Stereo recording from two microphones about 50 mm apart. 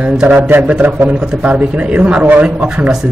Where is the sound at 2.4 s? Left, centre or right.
Centre.